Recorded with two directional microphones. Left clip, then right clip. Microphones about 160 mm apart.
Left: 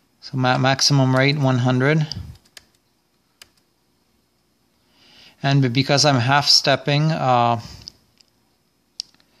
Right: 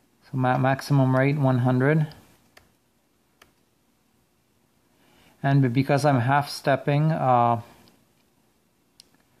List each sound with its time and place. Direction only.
0.2 s speech: 15° left (ahead or behind)
5.1 s speech: 15° left (ahead or behind)